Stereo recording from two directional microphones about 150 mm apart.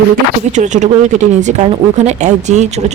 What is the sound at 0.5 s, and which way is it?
A woman's voice, 55° right (ahead or behind).